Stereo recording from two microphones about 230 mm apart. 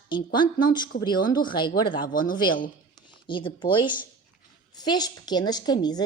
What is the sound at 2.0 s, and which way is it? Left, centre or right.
Speech, left.